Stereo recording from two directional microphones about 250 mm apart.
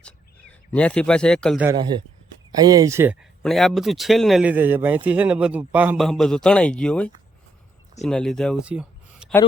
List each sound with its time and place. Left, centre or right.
0.7 s speech: centre
1.6 s speech: centre